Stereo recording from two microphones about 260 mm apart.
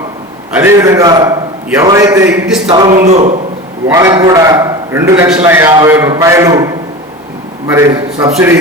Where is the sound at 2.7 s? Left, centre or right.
Centre.